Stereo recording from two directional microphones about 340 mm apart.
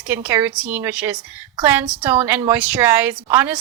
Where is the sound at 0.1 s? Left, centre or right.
Centre.